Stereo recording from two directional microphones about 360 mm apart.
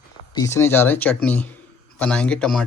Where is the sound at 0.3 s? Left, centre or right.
Centre.